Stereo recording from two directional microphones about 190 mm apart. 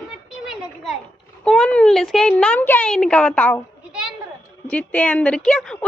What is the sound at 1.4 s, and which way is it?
A woman's voice, 5° left (ahead or behind).